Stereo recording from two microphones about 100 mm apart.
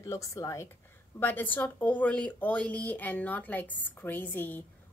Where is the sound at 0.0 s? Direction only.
30° left (ahead or behind).